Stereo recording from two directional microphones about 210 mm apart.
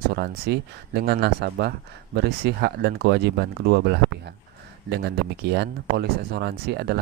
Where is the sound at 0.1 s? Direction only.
50° right (ahead or behind).